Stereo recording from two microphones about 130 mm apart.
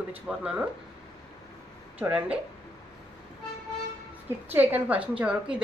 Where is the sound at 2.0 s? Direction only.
10° right (ahead or behind).